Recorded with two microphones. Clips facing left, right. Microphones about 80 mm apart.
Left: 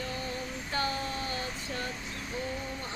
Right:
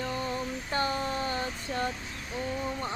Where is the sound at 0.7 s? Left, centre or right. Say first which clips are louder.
Right 3 dB; right.